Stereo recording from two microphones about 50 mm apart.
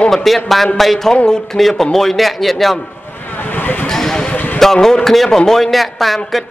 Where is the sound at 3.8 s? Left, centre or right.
Centre.